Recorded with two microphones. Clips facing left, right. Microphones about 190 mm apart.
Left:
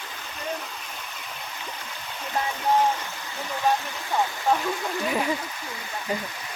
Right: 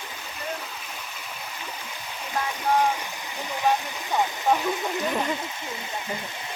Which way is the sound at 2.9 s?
15° right (ahead or behind).